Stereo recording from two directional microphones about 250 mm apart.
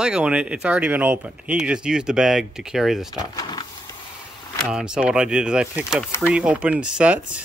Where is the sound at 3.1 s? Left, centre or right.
Centre.